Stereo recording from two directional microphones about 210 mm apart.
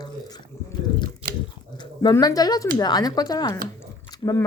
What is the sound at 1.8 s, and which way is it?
Speech, 20° left (ahead or behind).